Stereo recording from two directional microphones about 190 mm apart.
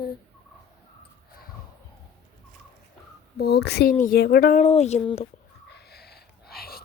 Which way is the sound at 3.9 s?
50° left (ahead or behind).